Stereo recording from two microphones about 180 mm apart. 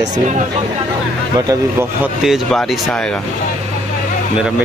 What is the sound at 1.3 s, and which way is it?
Speech, 20° right (ahead or behind).